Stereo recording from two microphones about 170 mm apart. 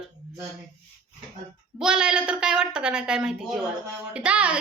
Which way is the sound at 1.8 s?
5° right (ahead or behind).